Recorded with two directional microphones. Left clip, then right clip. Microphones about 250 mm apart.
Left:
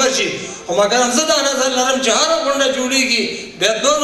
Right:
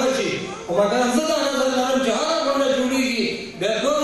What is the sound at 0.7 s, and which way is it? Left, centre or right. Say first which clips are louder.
A man's voice: left 5 dB; centre.